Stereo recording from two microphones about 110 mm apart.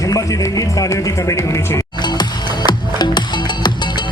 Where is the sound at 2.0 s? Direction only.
40° left (ahead or behind).